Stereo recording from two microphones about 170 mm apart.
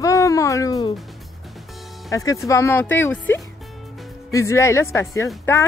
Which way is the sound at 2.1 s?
20° left (ahead or behind).